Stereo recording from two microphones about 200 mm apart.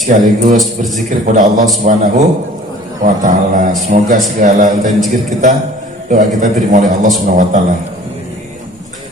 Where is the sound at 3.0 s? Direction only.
40° right (ahead or behind).